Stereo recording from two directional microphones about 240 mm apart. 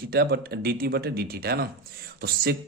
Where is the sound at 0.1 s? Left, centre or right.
Right.